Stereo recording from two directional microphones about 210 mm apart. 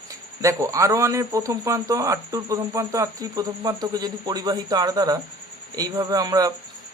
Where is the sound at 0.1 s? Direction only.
15° right (ahead or behind).